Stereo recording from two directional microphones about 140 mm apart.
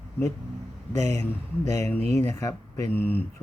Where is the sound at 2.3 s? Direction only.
20° left (ahead or behind).